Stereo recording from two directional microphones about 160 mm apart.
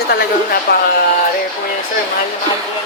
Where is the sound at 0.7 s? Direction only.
80° left.